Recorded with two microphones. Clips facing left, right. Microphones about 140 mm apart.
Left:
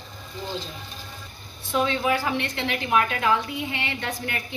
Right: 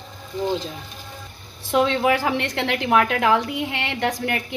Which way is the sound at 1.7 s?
75° right (ahead or behind).